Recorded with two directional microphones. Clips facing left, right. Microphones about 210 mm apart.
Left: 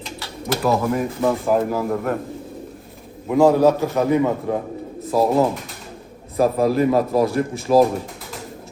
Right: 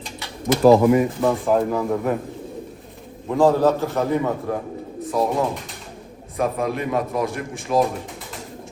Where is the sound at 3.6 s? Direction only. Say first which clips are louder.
Left 3 dB; 20° left (ahead or behind); by 7.8 s 40° left (ahead or behind).